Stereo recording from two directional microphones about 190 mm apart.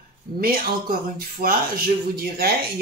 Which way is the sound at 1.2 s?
50° right (ahead or behind).